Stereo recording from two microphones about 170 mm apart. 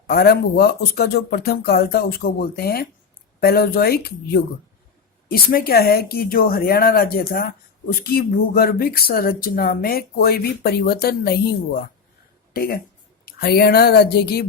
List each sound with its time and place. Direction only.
0.1 s speech: 65° left (ahead or behind)